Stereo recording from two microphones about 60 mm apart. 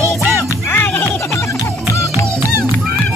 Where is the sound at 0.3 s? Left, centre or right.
Left.